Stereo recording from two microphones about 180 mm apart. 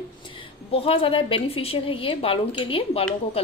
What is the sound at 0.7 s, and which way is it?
A woman's voice, 30° left (ahead or behind).